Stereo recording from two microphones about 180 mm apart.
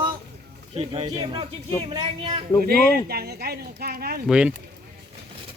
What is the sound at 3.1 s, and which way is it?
Speech, 60° right (ahead or behind).